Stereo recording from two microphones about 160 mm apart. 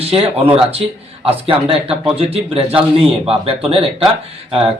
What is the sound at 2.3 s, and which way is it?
Speech, 40° right (ahead or behind).